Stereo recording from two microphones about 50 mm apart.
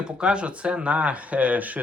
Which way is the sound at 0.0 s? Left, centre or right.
Centre.